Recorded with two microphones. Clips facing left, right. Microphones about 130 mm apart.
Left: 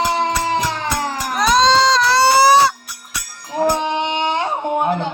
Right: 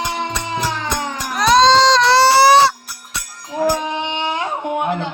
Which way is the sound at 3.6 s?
25° left (ahead or behind).